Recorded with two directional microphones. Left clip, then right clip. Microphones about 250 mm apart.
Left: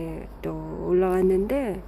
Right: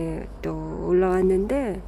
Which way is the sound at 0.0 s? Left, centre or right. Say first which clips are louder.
Right 3 dB; centre.